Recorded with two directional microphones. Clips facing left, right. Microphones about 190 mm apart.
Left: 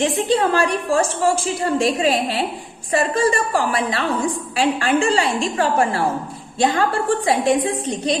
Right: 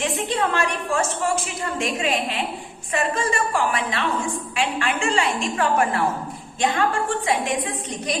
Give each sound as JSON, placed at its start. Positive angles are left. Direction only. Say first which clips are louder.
{"t": 0.0, "sound": "a woman's voice", "louder": "left 6 dB", "side_deg": 35}